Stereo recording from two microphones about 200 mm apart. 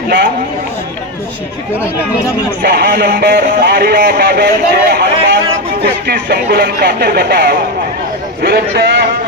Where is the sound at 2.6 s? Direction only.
45° right (ahead or behind).